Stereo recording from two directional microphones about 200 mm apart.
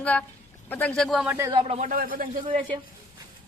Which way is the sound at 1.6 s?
35° right (ahead or behind).